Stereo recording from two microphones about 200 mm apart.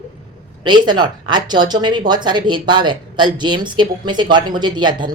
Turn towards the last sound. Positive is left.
turn(degrees=-20)  # may be behind; listen again after turning